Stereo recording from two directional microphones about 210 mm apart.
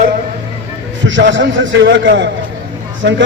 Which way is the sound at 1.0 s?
60° right (ahead or behind).